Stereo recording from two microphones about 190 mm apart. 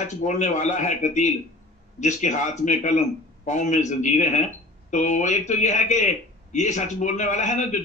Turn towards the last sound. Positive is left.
turn(degrees=40)  # may be behind; listen again after turning